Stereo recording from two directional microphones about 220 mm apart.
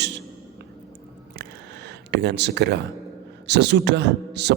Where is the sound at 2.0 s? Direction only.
50° right (ahead or behind).